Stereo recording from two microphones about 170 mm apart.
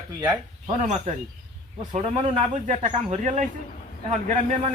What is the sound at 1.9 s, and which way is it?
Speech, 40° right (ahead or behind).